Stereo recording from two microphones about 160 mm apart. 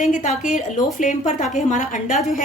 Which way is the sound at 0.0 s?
50° left (ahead or behind).